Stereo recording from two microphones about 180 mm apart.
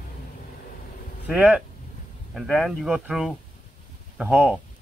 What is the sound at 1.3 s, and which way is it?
Speech, 5° right (ahead or behind).